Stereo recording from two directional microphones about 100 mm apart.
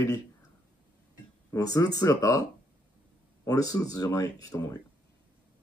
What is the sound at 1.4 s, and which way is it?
Speech, 35° left (ahead or behind).